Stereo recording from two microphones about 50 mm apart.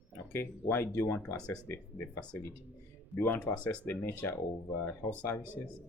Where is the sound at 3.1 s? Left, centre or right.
Left.